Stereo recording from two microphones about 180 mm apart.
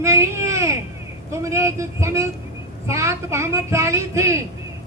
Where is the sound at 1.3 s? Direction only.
15° right (ahead or behind).